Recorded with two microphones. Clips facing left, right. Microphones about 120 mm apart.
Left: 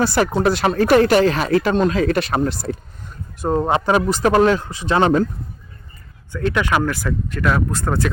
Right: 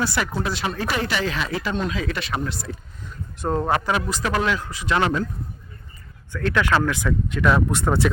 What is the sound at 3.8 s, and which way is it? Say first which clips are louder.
Speech: left 8 dB; 40° left (ahead or behind).